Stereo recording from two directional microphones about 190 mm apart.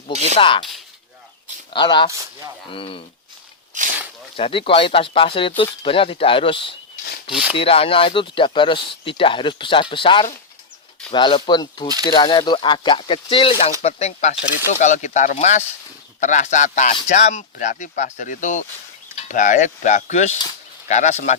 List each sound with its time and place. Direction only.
0.1 s speech: 35° right (ahead or behind)
0.3 s speech: 25° left (ahead or behind)
1.7 s speech: 25° left (ahead or behind)
3.7 s speech: 40° right (ahead or behind)
4.4 s speech: 30° left (ahead or behind)